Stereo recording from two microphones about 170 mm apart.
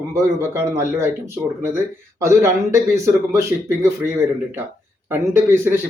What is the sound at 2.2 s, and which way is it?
Speech, 15° right (ahead or behind).